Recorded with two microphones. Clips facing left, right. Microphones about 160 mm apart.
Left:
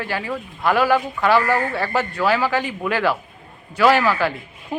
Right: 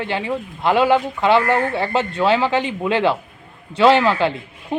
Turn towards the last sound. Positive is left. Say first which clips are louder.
# right 2 dB
turn(degrees=-25)  # may be behind; listen again after turning